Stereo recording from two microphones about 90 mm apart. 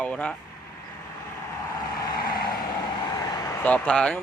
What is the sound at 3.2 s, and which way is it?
Vehicle, 45° left (ahead or behind).